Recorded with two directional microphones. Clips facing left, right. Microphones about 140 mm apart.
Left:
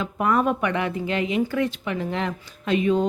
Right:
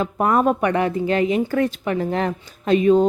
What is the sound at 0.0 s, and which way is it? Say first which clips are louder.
A woman's voice: right 4 dB; 40° right (ahead or behind).